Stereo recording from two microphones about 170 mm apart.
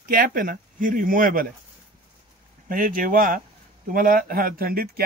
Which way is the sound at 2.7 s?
55° right (ahead or behind).